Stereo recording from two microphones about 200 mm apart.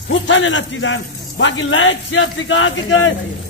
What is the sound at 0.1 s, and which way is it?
A man's voice, 65° left (ahead or behind).